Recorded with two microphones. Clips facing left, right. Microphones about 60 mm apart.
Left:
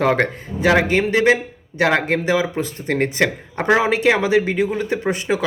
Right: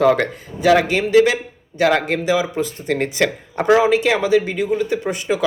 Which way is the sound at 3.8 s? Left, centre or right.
Left.